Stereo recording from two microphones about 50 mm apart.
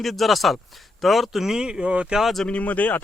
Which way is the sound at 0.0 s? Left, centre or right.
Centre.